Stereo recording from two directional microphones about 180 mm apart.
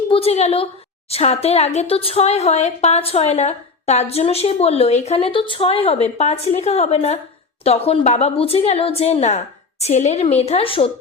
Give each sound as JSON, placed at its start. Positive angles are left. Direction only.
{"t": 0.1, "sound": "a woman's voice", "side_deg": 35}